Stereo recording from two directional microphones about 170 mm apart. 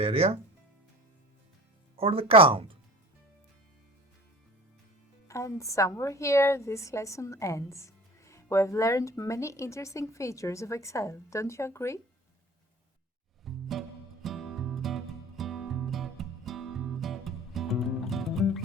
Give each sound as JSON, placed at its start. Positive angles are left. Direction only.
{"t": 0.0, "sound": "speech", "side_deg": -35}
{"t": 2.0, "sound": "speech", "side_deg": -35}
{"t": 5.3, "sound": "a woman's voice", "side_deg": 15}
{"t": 13.4, "sound": "music", "side_deg": 0}